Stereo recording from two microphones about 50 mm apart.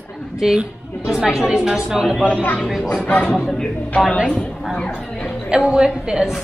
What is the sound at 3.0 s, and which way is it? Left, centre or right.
Speech, left.